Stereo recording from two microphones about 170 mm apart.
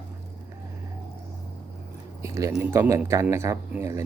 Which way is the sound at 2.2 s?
15° right (ahead or behind).